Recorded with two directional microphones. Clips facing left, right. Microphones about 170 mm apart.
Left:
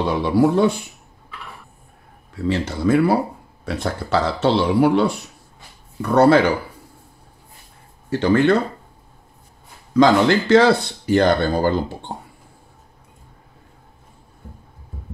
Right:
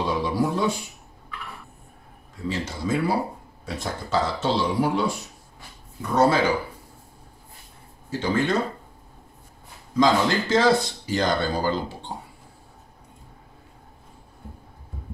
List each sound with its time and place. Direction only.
0.0 s speech: 65° left (ahead or behind)
2.4 s a man's voice: 65° left (ahead or behind)
6.1 s speech: 65° left (ahead or behind)
8.1 s speech: 65° left (ahead or behind)
9.9 s speech: 65° left (ahead or behind)
12.1 s a sound: 50° left (ahead or behind)